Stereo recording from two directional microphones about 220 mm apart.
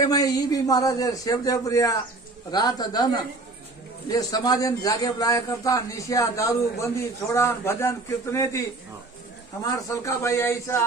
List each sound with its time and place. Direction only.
0.0 s a man's voice: 15° left (ahead or behind)